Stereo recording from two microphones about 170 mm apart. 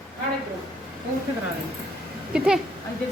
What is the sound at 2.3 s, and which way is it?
Speech, 5° right (ahead or behind).